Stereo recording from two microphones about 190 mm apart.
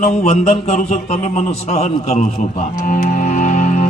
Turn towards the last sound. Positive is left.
turn(degrees=40)  # may be behind; listen again after turning